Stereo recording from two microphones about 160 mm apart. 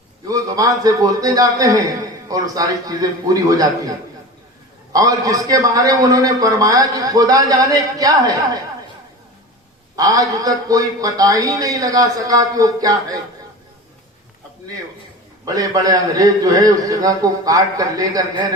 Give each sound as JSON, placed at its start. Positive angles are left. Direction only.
{"t": 0.3, "sound": "a man's voice", "side_deg": -20}
{"t": 9.9, "sound": "a man's voice", "side_deg": -20}
{"t": 15.4, "sound": "a man's voice", "side_deg": -20}